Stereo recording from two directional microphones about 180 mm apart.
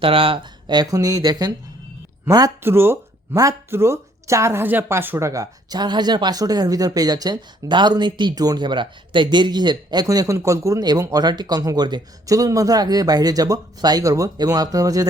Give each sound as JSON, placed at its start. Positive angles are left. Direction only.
{"t": 0.0, "sound": "speech", "side_deg": -30}